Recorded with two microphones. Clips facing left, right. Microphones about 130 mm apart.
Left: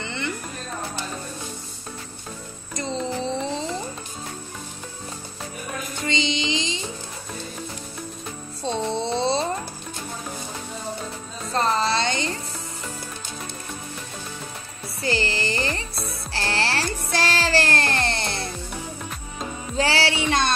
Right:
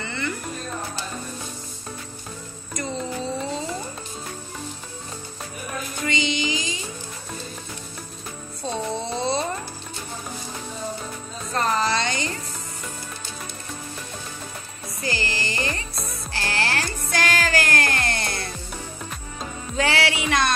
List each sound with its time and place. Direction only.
0.0 s a sound: 20° left (ahead or behind)
2.7 s music: 25° left (ahead or behind)
6.0 s music: 25° left (ahead or behind)
9.0 s a sound: 30° left (ahead or behind)
11.5 s music: 30° left (ahead or behind)
15.0 s music: 30° left (ahead or behind)
19.8 s music: 30° left (ahead or behind)